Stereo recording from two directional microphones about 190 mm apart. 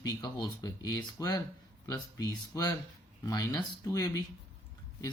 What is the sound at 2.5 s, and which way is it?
Speech, 15° left (ahead or behind).